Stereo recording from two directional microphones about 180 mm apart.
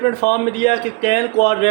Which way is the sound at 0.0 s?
40° left (ahead or behind).